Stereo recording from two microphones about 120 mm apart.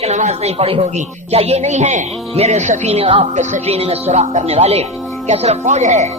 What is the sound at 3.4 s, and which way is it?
Speech, 85° right.